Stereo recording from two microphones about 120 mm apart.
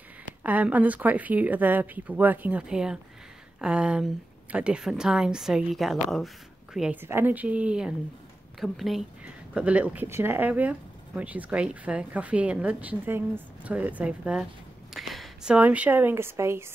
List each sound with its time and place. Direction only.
0.4 s a woman's voice: 15° right (ahead or behind)
7.0 s a woman's voice: 20° right (ahead or behind); by 9.0 s centre (ahead or behind)
9.2 s speech: 10° right (ahead or behind)
15.0 s a sound: centre (ahead or behind)
15.5 s speech: 10° right (ahead or behind)